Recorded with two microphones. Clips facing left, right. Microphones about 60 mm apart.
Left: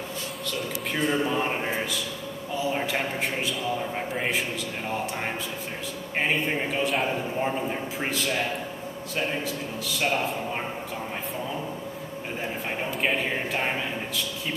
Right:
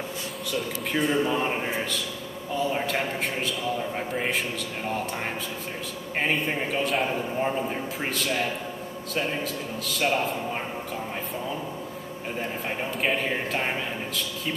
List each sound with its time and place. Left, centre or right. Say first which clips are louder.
0.5 s a man's voice: right 2 dB; centre
6.1 s a man's voice: even; centre
12.6 s a man's voice: even; centre